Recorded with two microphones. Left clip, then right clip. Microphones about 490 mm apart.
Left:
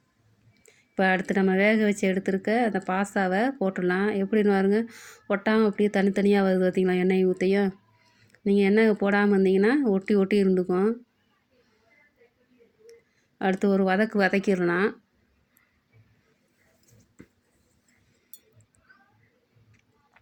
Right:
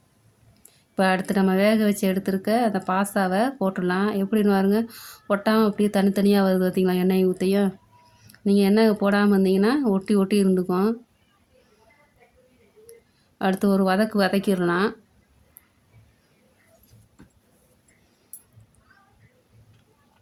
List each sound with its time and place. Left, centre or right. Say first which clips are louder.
0.9 s speech: right 2 dB; right
13.4 s speech: right 2 dB; right